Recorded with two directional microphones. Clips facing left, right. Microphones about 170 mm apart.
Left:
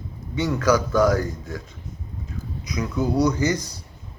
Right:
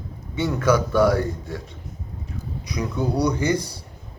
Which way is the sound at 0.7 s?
25° right (ahead or behind).